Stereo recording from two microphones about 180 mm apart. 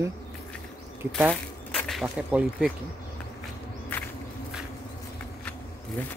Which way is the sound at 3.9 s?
10° left (ahead or behind).